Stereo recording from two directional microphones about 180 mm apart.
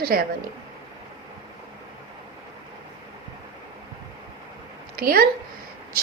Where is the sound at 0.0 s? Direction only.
55° right (ahead or behind).